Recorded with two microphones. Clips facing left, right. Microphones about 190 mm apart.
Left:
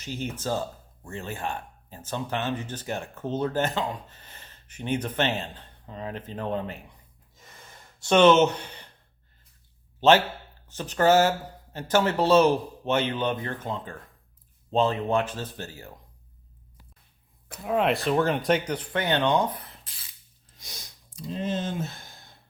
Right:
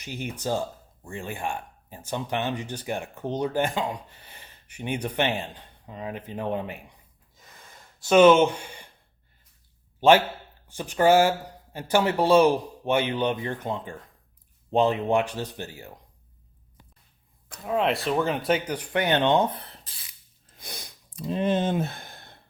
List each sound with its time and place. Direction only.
0.0 s speech: 15° right (ahead or behind)
7.9 s speech: 5° right (ahead or behind)
10.0 s speech: 10° right (ahead or behind)
17.5 s speech: 5° left (ahead or behind); by 19.8 s 30° right (ahead or behind)
20.6 s a sound: 60° right (ahead or behind)